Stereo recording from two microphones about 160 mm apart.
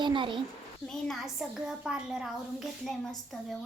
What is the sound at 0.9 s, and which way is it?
A woman's voice, centre (ahead or behind).